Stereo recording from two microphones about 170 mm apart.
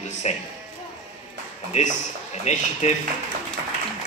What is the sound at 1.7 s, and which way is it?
Speech, 45° left (ahead or behind).